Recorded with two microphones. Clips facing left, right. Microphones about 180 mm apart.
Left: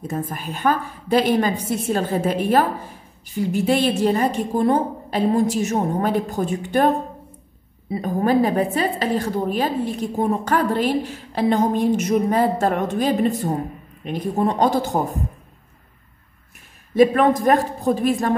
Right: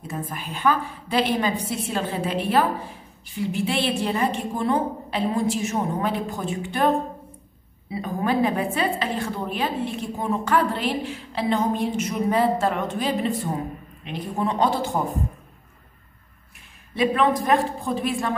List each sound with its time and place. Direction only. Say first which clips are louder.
0.1 s a woman's voice: left 3 dB; 45° left (ahead or behind)
7.9 s a woman's voice: left 5 dB; 40° left (ahead or behind)
16.9 s a woman's voice: left 6 dB; 45° left (ahead or behind)